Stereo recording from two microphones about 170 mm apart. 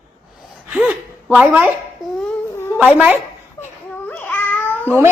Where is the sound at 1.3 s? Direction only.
5° right (ahead or behind).